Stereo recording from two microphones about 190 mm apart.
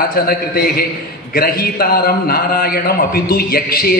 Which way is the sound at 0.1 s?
50° left (ahead or behind).